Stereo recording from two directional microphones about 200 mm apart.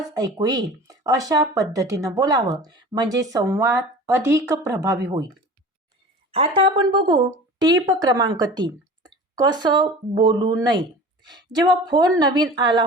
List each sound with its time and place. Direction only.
0.1 s a woman's voice: 20° right (ahead or behind)
6.3 s a woman's voice: 30° right (ahead or behind)